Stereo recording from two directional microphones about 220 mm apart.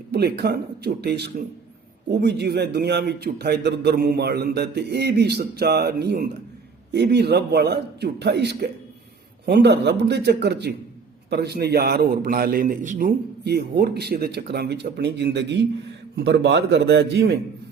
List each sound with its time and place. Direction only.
0.1 s a man's voice: 45° right (ahead or behind)